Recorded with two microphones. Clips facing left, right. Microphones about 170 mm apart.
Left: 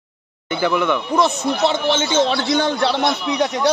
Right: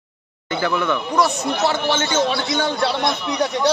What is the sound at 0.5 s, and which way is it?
Speech, 15° left (ahead or behind).